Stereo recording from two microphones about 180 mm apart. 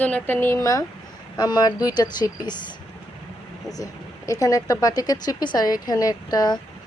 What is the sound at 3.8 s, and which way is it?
Speech, 20° left (ahead or behind).